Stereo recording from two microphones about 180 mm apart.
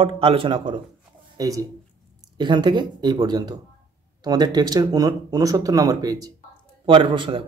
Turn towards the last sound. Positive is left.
turn(degrees=-25)  # may be behind; listen again after turning